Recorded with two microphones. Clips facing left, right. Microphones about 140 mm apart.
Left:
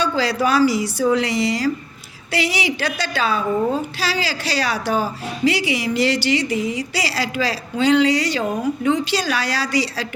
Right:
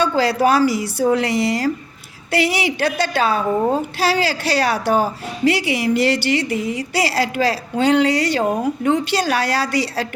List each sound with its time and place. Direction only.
0.0 s a woman's voice: 55° right (ahead or behind)